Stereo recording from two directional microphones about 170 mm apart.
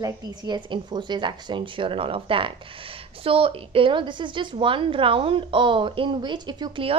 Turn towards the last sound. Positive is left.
turn(degrees=-30)  # may be behind; listen again after turning